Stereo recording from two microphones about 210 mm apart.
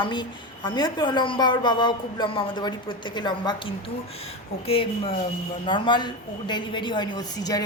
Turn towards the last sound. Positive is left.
turn(degrees=20)  # may be behind; listen again after turning